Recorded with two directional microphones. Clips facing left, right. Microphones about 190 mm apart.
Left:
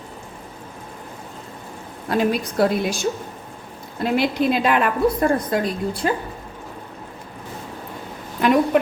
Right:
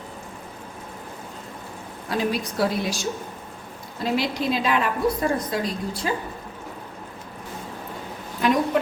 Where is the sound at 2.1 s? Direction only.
55° left (ahead or behind).